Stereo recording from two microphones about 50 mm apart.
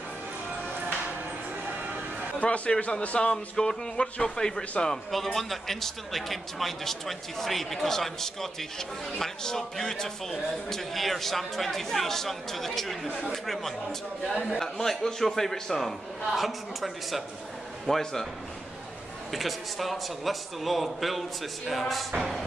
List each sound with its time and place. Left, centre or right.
2.4 s a man's voice: left; by 18.2 s centre
19.3 s a man's voice: centre